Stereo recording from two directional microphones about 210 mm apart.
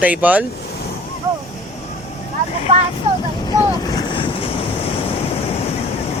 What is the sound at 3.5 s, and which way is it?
Boat, 15° left (ahead or behind).